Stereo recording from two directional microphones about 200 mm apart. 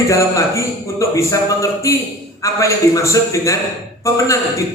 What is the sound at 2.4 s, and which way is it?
Speech, 15° left (ahead or behind).